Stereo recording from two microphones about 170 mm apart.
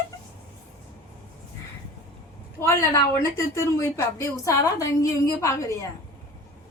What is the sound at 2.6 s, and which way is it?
A woman's voice, 15° left (ahead or behind).